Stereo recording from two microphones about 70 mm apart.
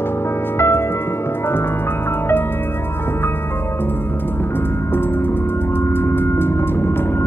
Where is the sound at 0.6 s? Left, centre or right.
Left.